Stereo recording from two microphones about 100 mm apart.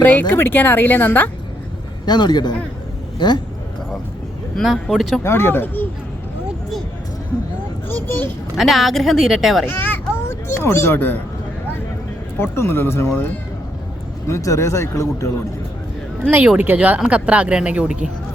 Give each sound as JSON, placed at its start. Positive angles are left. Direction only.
{"t": 0.0, "sound": "speech", "side_deg": 20}
{"t": 2.0, "sound": "a man's voice", "side_deg": 45}
{"t": 4.5, "sound": "a woman's voice", "side_deg": 0}
{"t": 5.2, "sound": "speech", "side_deg": 25}
{"t": 8.0, "sound": "a child's voice", "side_deg": 20}
{"t": 8.5, "sound": "a woman's voice", "side_deg": 0}
{"t": 9.6, "sound": "a child's voice", "side_deg": 20}
{"t": 12.4, "sound": "speech", "side_deg": 25}
{"t": 16.6, "sound": "speech", "side_deg": -15}